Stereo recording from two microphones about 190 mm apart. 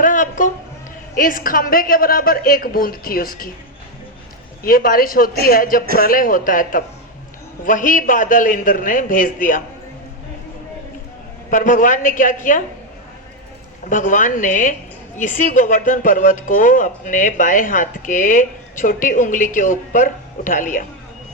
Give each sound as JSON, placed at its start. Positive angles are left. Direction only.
{"t": 0.0, "sound": "a sound", "side_deg": 45}
{"t": 1.1, "sound": "speech", "side_deg": 45}
{"t": 4.6, "sound": "speech", "side_deg": 50}
{"t": 11.5, "sound": "speech", "side_deg": 45}
{"t": 13.9, "sound": "speech", "side_deg": 45}